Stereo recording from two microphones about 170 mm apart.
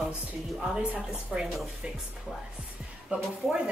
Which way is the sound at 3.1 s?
5° right (ahead or behind).